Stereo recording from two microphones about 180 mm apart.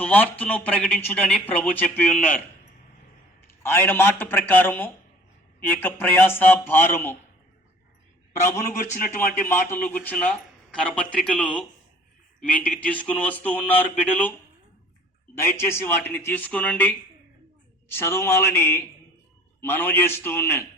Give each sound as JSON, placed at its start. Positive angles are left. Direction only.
{"t": 0.0, "sound": "speech", "side_deg": 10}
{"t": 3.6, "sound": "speech", "side_deg": 10}
{"t": 8.8, "sound": "speech", "side_deg": 50}
{"t": 9.5, "sound": "speech", "side_deg": 10}
{"t": 15.4, "sound": "speech", "side_deg": 15}
{"t": 17.9, "sound": "speech", "side_deg": 15}